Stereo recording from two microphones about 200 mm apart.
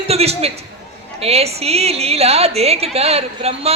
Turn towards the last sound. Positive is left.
turn(degrees=-30)  # may be behind; listen again after turning